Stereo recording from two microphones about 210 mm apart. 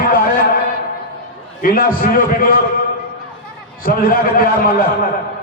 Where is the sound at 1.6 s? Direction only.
45° left (ahead or behind).